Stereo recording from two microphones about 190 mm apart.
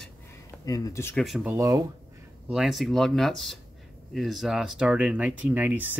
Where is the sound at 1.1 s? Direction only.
Centre (ahead or behind).